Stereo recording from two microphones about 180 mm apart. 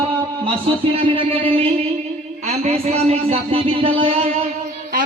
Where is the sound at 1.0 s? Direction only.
30° right (ahead or behind).